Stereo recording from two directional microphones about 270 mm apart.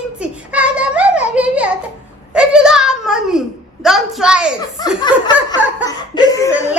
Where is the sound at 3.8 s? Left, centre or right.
Centre.